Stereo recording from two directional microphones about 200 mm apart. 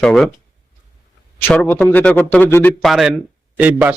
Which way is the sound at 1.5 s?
5° left (ahead or behind).